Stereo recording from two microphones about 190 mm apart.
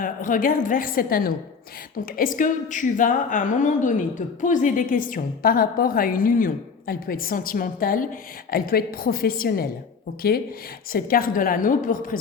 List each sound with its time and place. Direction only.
0.0 s a woman's voice: 45° left (ahead or behind)
10.9 s a woman's voice: 50° left (ahead or behind)